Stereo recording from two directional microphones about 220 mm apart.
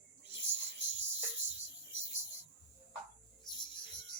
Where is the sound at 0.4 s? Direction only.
10° right (ahead or behind).